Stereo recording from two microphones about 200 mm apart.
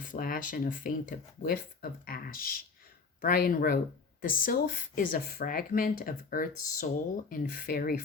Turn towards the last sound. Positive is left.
turn(degrees=45)  # may be behind; listen again after turning